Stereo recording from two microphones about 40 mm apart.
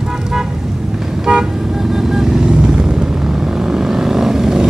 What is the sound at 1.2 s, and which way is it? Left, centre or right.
Toot, right.